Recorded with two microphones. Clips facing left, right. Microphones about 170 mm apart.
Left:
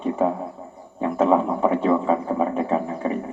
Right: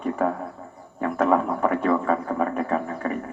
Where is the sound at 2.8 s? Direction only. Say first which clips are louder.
Left 3 dB; 10° left (ahead or behind).